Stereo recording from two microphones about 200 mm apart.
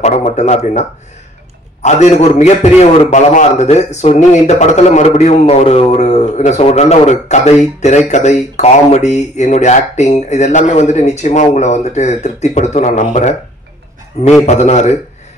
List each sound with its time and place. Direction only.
0.0 s a man's voice: 35° left (ahead or behind)
1.8 s a man's voice: 35° left (ahead or behind)
14.4 s a man's voice: 35° left (ahead or behind)